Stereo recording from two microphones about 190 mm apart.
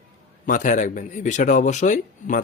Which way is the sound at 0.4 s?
45° left (ahead or behind).